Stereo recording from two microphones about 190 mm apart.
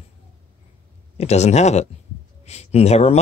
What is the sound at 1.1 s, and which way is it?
Speech, 35° left (ahead or behind).